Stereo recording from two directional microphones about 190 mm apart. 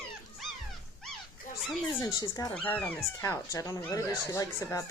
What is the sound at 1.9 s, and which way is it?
Speech, 15° left (ahead or behind).